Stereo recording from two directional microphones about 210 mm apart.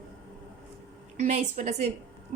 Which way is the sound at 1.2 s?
35° right (ahead or behind).